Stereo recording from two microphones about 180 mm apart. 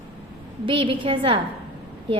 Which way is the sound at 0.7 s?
30° right (ahead or behind).